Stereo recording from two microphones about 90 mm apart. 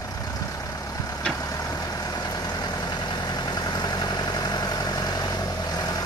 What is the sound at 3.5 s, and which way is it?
Vehicle, 50° left (ahead or behind).